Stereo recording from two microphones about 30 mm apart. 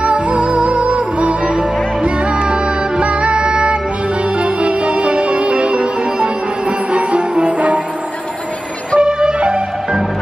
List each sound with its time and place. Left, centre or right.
0.0 s music: right
3.0 s music: right
6.9 s cello: right
8.9 s music: right